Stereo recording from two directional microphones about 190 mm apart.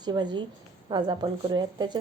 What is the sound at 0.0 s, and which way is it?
A woman's voice, 20° right (ahead or behind).